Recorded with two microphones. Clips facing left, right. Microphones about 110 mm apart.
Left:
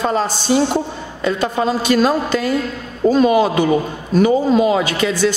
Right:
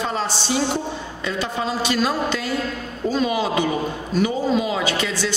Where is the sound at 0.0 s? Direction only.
45° left (ahead or behind).